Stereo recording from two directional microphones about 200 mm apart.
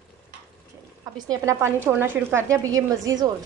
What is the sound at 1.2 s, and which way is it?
Speech, 15° right (ahead or behind).